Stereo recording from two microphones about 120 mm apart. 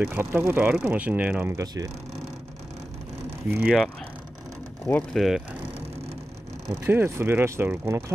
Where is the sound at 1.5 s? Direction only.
30° right (ahead or behind).